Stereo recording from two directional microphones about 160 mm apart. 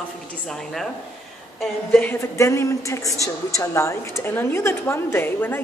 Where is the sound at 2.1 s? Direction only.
15° left (ahead or behind).